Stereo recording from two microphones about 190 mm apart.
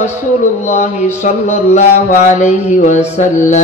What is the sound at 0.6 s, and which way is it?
Mantra, 35° left (ahead or behind).